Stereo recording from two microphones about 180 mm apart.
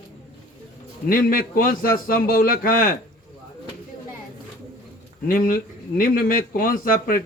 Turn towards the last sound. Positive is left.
turn(degrees=55)  # may be behind; listen again after turning